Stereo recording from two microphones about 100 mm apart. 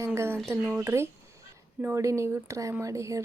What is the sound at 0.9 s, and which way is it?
A woman's voice, 25° right (ahead or behind).